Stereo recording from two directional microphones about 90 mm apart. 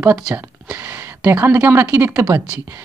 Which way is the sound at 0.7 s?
25° right (ahead or behind).